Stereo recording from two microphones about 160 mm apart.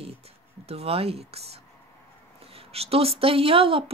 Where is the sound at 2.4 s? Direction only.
40° right (ahead or behind).